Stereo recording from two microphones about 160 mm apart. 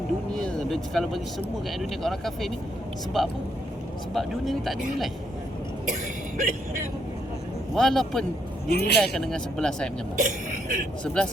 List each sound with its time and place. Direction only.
0.3 s vehicle: 5° left (ahead or behind)
1.8 s speech: centre (ahead or behind)
5.8 s vehicle: 55° right (ahead or behind)
7.7 s speech: centre (ahead or behind)
8.7 s speech: 85° left
9.0 s speech: 5° left (ahead or behind)
10.2 s a sound: 55° right (ahead or behind)
11.0 s speech: 5° left (ahead or behind)